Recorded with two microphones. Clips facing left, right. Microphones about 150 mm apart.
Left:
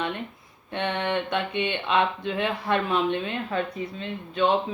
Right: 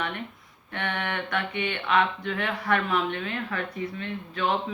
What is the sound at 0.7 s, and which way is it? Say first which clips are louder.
Speech: left 5 dB; 20° left (ahead or behind).